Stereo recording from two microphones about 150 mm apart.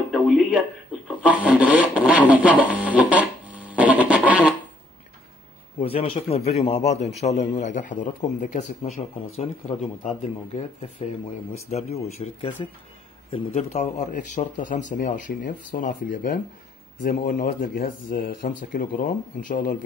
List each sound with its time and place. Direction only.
0.1 s rub: 5° right (ahead or behind)
5.8 s a man's voice: 40° left (ahead or behind)
11.7 s a man's voice: 45° left (ahead or behind); by 19.8 s 70° left (ahead or behind)